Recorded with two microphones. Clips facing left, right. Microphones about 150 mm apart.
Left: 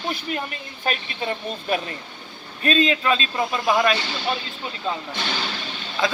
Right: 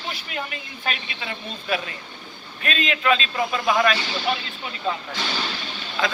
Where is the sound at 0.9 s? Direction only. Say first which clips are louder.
Left 5 dB; 40° left (ahead or behind).